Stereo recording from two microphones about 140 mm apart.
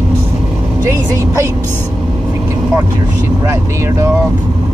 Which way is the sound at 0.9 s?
20° right (ahead or behind).